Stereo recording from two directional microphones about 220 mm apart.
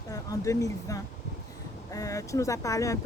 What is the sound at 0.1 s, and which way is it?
Speech, 15° left (ahead or behind).